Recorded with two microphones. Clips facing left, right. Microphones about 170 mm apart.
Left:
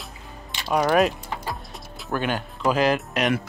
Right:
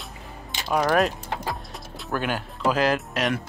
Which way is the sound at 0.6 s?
Centre (ahead or behind).